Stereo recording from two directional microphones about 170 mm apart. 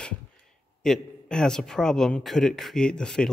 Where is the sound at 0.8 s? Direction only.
5° left (ahead or behind).